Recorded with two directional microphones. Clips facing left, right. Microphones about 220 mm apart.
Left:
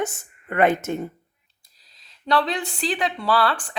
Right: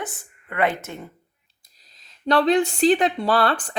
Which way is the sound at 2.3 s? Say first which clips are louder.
Right 5 dB; 45° right (ahead or behind).